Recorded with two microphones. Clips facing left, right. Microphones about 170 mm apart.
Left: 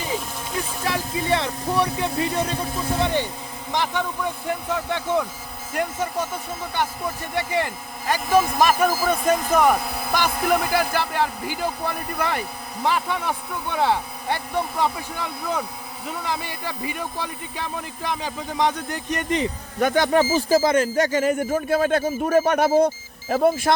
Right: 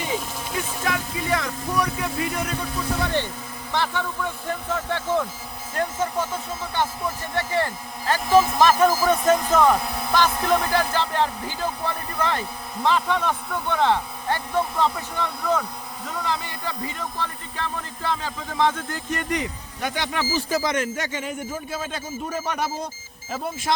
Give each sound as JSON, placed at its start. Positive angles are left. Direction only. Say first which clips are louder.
{"t": 0.9, "sound": "speech", "louder": "left 3 dB", "side_deg": 30}
{"t": 3.0, "sound": "speech", "louder": "left 4 dB", "side_deg": 15}
{"t": 19.8, "sound": "speech", "louder": "left 9 dB", "side_deg": 50}
{"t": 21.3, "sound": "speech", "louder": "left 9 dB", "side_deg": 65}